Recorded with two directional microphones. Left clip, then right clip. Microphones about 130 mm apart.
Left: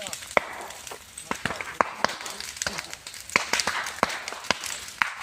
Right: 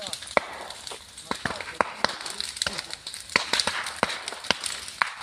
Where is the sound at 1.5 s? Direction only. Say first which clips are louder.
Left 3 dB; 15° right (ahead or behind).